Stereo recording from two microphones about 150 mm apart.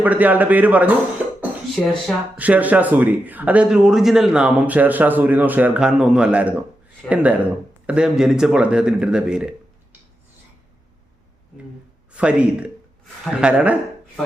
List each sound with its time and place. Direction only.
0.0 s a man's voice: 10° right (ahead or behind)
1.7 s speech: centre (ahead or behind)
2.4 s a man's voice: 10° right (ahead or behind)
12.1 s a man's voice: 10° right (ahead or behind)